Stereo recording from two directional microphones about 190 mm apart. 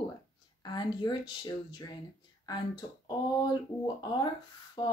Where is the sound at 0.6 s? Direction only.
25° left (ahead or behind).